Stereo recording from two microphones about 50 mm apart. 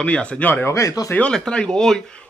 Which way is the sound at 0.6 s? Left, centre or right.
Left.